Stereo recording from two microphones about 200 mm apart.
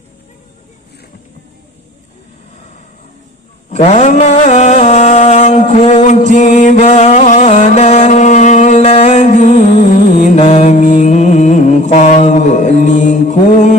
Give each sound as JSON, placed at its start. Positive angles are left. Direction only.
{"t": 3.7, "sound": "mantra", "side_deg": 35}